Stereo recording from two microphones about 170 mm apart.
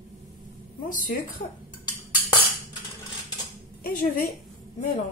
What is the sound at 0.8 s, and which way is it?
Speech, 50° left (ahead or behind).